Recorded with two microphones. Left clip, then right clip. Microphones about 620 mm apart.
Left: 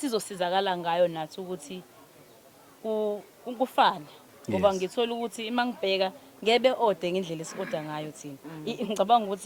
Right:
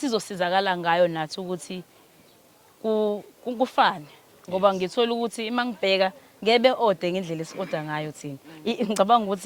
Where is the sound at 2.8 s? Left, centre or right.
Right.